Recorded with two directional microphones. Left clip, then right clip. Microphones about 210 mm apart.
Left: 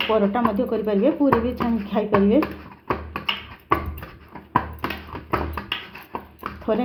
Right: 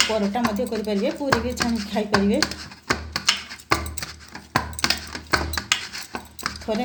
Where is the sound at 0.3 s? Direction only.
25° left (ahead or behind).